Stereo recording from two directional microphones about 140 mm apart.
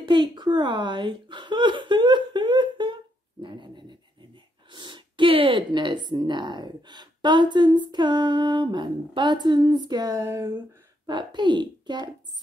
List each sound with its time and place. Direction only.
0.0 s a sound: 35° right (ahead or behind)
4.7 s speech: 35° right (ahead or behind)
11.1 s a child's voice: 35° right (ahead or behind)